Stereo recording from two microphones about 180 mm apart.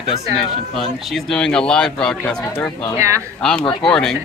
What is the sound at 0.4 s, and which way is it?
Speech, centre (ahead or behind).